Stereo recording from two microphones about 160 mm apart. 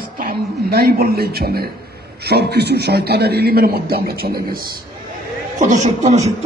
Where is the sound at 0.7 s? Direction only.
75° right (ahead or behind).